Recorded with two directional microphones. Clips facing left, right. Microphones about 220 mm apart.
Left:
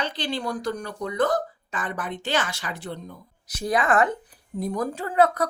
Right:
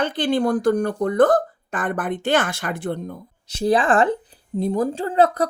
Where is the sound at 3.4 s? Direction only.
30° right (ahead or behind).